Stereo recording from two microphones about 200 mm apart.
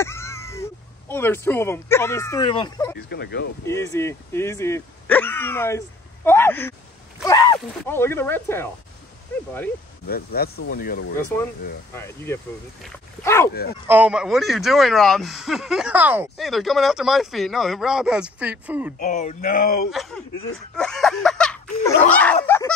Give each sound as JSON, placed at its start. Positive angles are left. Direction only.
{"t": 0.0, "sound": "speech", "side_deg": 15}
{"t": 3.0, "sound": "speech", "side_deg": 55}
{"t": 3.6, "sound": "speech", "side_deg": 15}
{"t": 10.0, "sound": "speech", "side_deg": 50}
{"t": 11.9, "sound": "speech", "side_deg": 10}
{"t": 13.8, "sound": "speech", "side_deg": -10}
{"t": 18.9, "sound": "speech", "side_deg": 40}
{"t": 19.9, "sound": "speech", "side_deg": 0}
{"t": 22.1, "sound": "a sound", "side_deg": 5}